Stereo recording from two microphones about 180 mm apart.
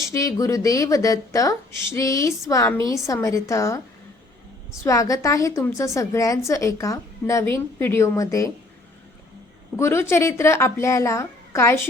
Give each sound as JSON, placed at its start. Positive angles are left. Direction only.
{"t": 0.1, "sound": "a woman's voice", "side_deg": 15}
{"t": 4.8, "sound": "a woman's voice", "side_deg": 20}
{"t": 9.7, "sound": "a woman's voice", "side_deg": 15}